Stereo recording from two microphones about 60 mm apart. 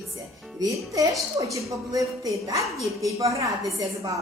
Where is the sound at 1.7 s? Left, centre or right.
Right.